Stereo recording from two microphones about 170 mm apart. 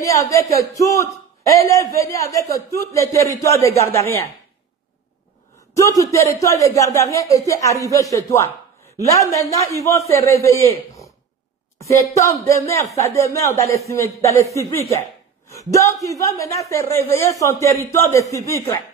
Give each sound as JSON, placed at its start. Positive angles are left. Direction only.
{"t": 0.0, "sound": "a man's voice", "side_deg": 20}
{"t": 5.8, "sound": "a man's voice", "side_deg": 20}
{"t": 11.8, "sound": "a man's voice", "side_deg": 20}
{"t": 15.7, "sound": "a man's voice", "side_deg": 20}